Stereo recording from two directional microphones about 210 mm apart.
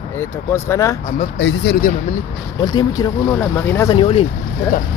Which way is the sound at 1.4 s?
65° left (ahead or behind).